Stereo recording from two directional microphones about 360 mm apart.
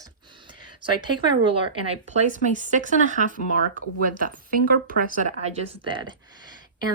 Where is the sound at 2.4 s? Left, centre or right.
Right.